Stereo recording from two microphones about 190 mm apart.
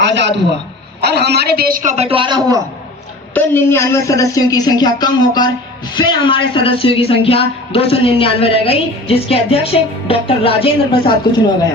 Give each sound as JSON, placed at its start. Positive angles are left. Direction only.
{"t": 0.0, "sound": "a sound", "side_deg": -65}
{"t": 1.0, "sound": "a man's voice", "side_deg": -60}
{"t": 3.3, "sound": "speech", "side_deg": 10}